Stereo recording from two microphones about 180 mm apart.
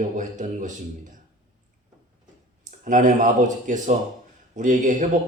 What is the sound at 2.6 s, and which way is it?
A man's voice, 45° right (ahead or behind).